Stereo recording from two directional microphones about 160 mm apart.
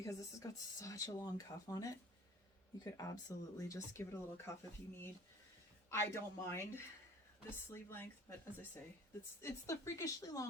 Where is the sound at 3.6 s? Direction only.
20° left (ahead or behind).